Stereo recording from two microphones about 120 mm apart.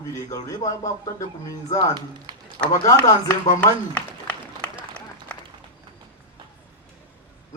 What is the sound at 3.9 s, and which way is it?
Applause, 10° left (ahead or behind).